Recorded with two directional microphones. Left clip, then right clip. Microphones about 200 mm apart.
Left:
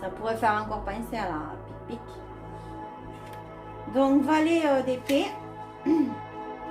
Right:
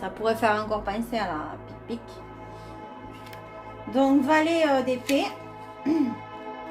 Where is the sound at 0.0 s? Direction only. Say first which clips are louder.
Right 2 dB; 30° right (ahead or behind).